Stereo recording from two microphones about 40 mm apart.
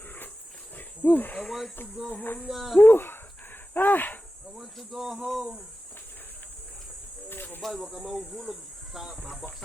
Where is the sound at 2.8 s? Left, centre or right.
Left.